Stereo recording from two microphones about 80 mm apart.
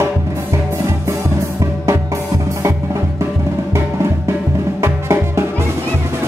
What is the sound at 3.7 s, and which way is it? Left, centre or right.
Music, right.